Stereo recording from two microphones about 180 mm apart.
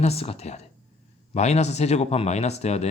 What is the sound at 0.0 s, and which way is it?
Speech, 35° left (ahead or behind).